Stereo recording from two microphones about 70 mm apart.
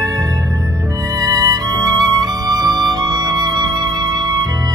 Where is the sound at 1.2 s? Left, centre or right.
Right.